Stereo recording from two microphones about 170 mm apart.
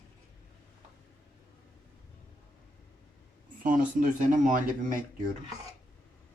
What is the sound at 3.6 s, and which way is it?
Speech, 50° right (ahead or behind).